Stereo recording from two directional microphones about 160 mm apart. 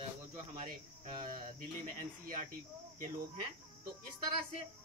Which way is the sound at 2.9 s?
55° right (ahead or behind).